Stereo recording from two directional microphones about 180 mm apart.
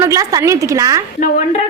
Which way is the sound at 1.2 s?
40° left (ahead or behind).